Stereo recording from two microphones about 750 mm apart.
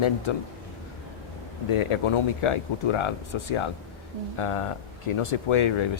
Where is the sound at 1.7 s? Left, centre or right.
Left.